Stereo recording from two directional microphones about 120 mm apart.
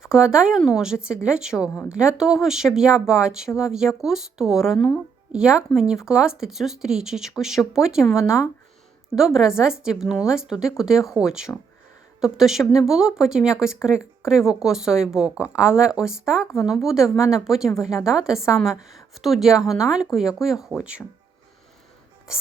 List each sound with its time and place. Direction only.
0.0 s a woman's voice: 5° right (ahead or behind)